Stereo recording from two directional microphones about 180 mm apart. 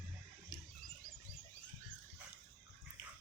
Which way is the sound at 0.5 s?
20° left (ahead or behind).